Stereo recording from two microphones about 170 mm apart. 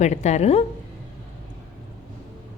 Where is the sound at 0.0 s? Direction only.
40° left (ahead or behind).